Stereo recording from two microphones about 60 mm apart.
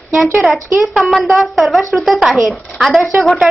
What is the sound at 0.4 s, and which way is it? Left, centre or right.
Speech, centre.